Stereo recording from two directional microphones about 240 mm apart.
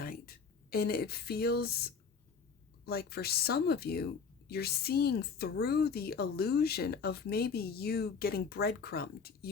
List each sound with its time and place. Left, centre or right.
0.0 s speech: left